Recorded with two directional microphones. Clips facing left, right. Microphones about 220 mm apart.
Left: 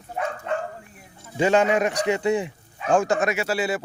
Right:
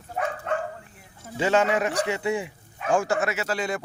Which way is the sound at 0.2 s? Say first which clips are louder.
Even; 5° right (ahead or behind).